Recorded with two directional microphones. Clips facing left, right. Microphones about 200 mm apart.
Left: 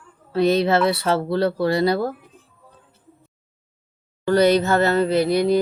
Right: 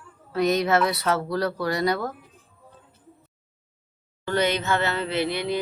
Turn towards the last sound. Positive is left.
turn(degrees=40)  # may be behind; listen again after turning